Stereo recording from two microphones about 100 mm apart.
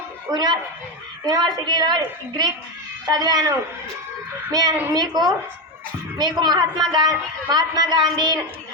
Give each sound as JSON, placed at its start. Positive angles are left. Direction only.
{"t": 0.3, "sound": "a woman's voice", "side_deg": -45}
{"t": 4.5, "sound": "a woman's voice", "side_deg": -45}